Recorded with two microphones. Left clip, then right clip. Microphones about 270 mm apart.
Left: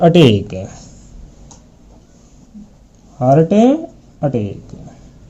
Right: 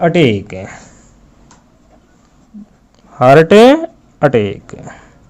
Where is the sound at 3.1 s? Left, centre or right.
Right.